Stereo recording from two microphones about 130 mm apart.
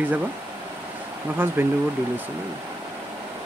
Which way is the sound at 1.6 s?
15° right (ahead or behind).